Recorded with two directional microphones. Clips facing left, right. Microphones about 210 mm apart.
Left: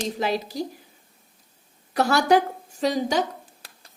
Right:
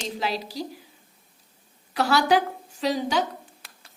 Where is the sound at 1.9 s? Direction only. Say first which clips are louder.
Left 2 dB; 50° left (ahead or behind).